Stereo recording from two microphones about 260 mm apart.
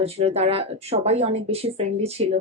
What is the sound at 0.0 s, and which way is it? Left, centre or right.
Speech, right.